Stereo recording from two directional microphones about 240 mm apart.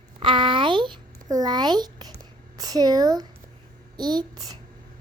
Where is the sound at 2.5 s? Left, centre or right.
Centre.